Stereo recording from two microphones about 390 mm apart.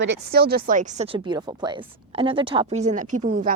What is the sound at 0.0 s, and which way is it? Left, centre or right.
Speech, right.